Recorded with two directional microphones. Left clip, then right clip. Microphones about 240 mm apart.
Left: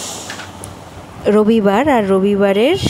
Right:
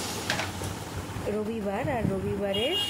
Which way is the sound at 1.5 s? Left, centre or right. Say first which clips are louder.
Left 18 dB; left.